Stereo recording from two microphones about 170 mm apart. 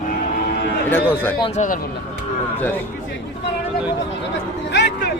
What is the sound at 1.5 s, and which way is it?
Speech, 50° left (ahead or behind).